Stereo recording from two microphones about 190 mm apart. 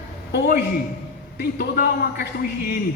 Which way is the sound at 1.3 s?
55° left (ahead or behind).